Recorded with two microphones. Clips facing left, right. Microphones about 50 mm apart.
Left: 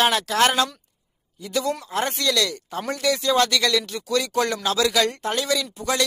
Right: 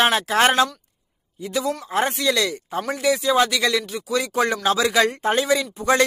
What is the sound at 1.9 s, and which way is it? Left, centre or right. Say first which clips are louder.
Speech: right 3 dB; right.